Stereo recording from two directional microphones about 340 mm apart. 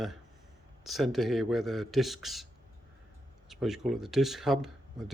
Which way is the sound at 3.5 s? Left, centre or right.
Centre.